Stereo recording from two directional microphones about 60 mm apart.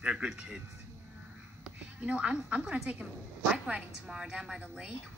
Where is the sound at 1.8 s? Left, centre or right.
Centre.